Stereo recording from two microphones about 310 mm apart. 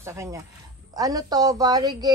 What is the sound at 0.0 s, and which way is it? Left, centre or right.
A woman's voice, centre.